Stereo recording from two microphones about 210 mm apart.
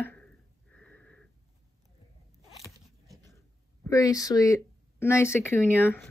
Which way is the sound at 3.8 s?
15° left (ahead or behind).